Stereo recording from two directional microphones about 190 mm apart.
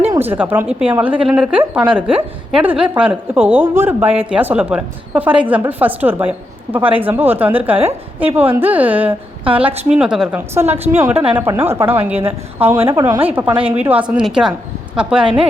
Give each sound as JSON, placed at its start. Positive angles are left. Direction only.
{"t": 0.0, "sound": "a woman's voice", "side_deg": -10}